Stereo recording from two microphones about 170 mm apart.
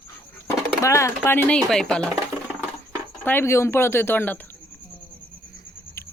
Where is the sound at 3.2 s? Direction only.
15° left (ahead or behind).